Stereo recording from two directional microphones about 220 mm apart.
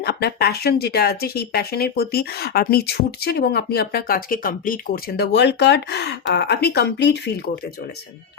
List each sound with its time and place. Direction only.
0.0 s speech: 45° left (ahead or behind)